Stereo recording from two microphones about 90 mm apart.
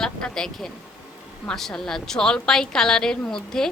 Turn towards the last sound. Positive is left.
turn(degrees=5)  # may be behind; listen again after turning